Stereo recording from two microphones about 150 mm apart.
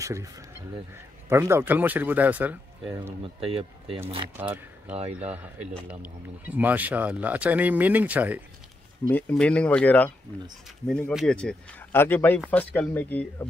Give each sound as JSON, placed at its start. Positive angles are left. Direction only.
{"t": 0.0, "sound": "speech", "side_deg": -20}
{"t": 1.3, "sound": "speech", "side_deg": -15}
{"t": 3.3, "sound": "speech", "side_deg": -40}
{"t": 4.4, "sound": "speech", "side_deg": -10}
{"t": 4.9, "sound": "speech", "side_deg": -45}
{"t": 5.9, "sound": "speech", "side_deg": -10}
{"t": 9.1, "sound": "speech", "side_deg": 10}